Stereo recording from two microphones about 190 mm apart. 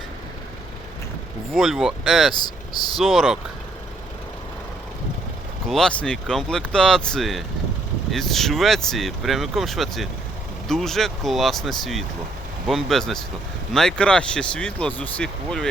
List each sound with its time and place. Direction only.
1.5 s speech: centre (ahead or behind)
2.3 s speech: 20° left (ahead or behind)
3.0 s speech: centre (ahead or behind)
5.6 s speech: centre (ahead or behind)